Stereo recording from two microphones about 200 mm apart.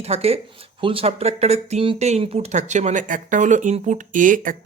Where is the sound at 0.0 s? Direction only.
30° right (ahead or behind).